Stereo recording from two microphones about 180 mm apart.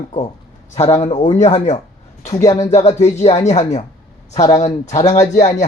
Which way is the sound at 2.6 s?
40° left (ahead or behind).